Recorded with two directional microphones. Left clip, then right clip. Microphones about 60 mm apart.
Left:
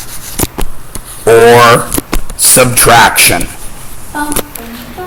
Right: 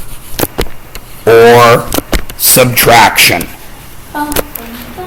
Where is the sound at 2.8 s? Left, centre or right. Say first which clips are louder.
Right 1 dB; right.